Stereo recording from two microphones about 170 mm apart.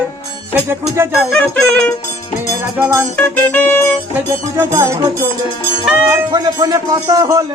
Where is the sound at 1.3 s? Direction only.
5° left (ahead or behind).